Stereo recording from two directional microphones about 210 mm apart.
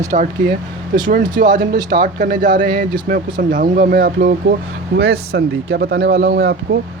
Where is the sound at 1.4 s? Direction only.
40° right (ahead or behind).